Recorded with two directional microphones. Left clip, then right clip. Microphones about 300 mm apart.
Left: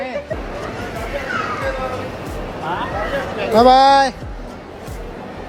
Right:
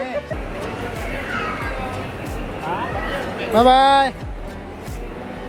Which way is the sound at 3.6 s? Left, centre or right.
Centre.